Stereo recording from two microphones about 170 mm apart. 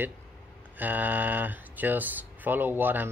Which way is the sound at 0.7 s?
10° right (ahead or behind).